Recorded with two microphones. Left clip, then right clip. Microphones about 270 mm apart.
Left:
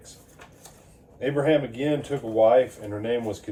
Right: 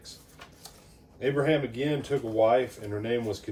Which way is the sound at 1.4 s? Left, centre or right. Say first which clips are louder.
Left 5 dB; centre.